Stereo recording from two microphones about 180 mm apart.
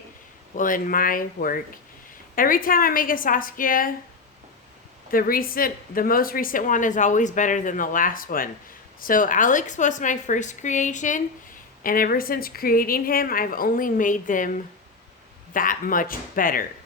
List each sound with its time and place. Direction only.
0.5 s speech: 50° left (ahead or behind)
5.1 s speech: 55° left (ahead or behind)
15.5 s speech: 50° left (ahead or behind)